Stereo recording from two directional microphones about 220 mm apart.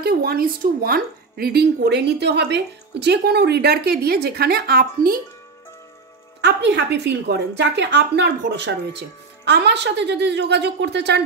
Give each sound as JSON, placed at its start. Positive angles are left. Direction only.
{"t": 0.0, "sound": "a woman's voice", "side_deg": -45}
{"t": 6.4, "sound": "a woman's voice", "side_deg": -50}